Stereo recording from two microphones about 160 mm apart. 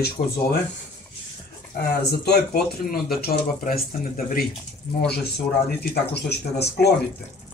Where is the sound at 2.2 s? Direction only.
80° left.